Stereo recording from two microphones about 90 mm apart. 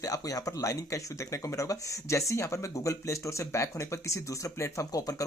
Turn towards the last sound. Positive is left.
turn(degrees=40)  # may be behind; listen again after turning